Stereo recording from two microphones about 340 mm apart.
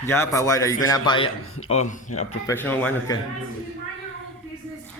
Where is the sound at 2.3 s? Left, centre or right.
Centre.